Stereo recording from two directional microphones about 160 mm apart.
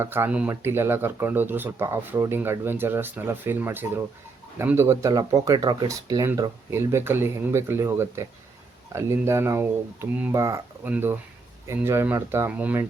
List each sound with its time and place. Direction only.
0.0 s speech: 15° right (ahead or behind)